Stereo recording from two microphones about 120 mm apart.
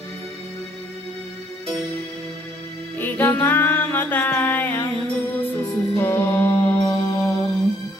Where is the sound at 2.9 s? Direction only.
15° left (ahead or behind).